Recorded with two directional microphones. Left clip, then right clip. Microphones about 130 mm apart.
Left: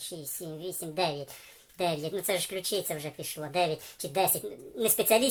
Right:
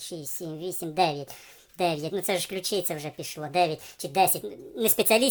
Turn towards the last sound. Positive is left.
turn(degrees=-45)  # may be behind; listen again after turning